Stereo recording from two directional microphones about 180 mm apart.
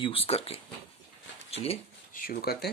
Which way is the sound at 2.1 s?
55° left (ahead or behind).